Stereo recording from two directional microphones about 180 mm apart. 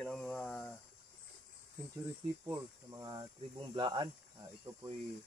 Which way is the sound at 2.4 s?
15° right (ahead or behind).